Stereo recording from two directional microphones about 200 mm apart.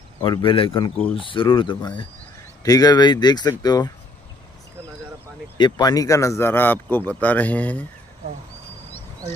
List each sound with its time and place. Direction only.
0.2 s speech: 25° left (ahead or behind)
5.6 s speech: 20° left (ahead or behind)